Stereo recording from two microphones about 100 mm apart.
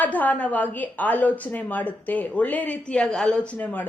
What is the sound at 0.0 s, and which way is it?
A woman's voice, 15° left (ahead or behind).